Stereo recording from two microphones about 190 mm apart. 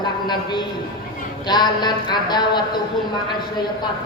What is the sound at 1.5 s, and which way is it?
A woman's voice, 20° left (ahead or behind).